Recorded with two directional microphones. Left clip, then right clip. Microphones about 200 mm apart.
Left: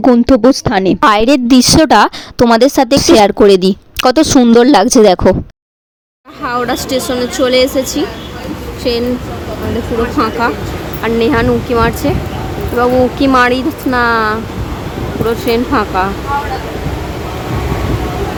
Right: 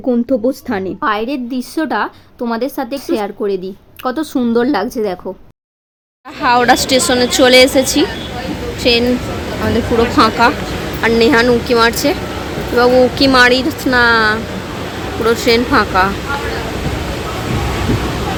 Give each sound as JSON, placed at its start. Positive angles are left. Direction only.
{"t": 0.3, "sound": "a woman's voice", "side_deg": 45}
{"t": 6.4, "sound": "a woman's voice", "side_deg": -5}
{"t": 10.2, "sound": "a woman's voice", "side_deg": 0}